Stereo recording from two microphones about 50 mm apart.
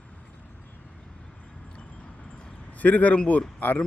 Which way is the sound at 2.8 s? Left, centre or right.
Left.